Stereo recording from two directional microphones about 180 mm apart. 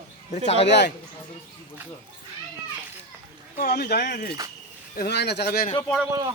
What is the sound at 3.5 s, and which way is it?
Speech, 60° left (ahead or behind).